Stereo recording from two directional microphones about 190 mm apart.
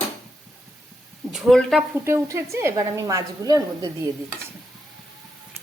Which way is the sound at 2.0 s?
15° right (ahead or behind).